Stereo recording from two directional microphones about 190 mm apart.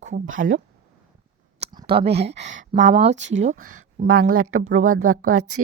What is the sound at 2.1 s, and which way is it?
Speech, 60° right (ahead or behind).